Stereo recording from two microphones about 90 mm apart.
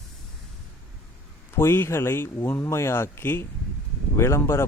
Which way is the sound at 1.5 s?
25° left (ahead or behind).